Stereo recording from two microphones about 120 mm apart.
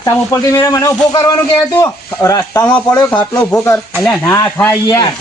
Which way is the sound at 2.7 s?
10° left (ahead or behind).